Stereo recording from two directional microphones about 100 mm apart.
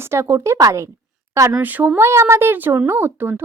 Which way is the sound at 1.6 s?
15° right (ahead or behind).